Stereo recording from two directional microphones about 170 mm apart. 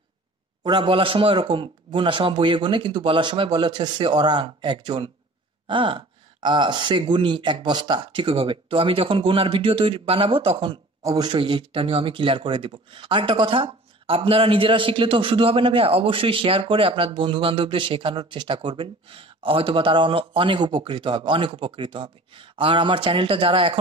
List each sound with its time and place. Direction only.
0.7 s a man's voice: 30° right (ahead or behind)